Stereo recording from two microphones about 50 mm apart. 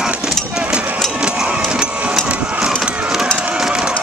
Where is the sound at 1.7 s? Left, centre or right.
Centre.